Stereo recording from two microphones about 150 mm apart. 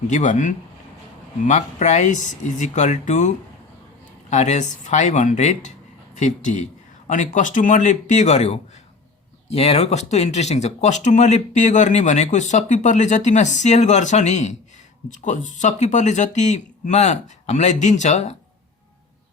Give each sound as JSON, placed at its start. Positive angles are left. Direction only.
{"t": 0.1, "sound": "speech", "side_deg": 55}